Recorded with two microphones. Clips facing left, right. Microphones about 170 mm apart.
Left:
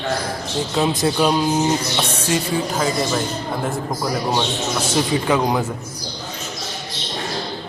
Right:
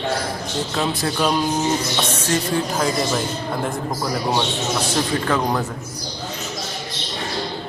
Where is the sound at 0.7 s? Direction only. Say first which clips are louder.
Left 5 dB; 20° left (ahead or behind); by 4.5 s centre (ahead or behind).